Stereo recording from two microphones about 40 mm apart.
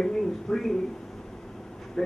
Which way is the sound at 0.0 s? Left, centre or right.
Centre.